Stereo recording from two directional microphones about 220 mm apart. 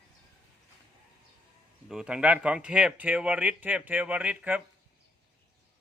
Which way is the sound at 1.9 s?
5° right (ahead or behind).